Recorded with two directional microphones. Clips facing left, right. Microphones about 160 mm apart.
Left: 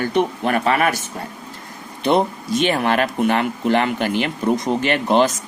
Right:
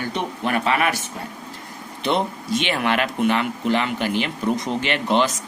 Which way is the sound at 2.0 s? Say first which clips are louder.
Left 5 dB; 45° left (ahead or behind).